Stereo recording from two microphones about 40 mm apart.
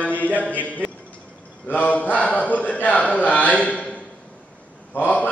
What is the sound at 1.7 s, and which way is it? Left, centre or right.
A man's voice, left.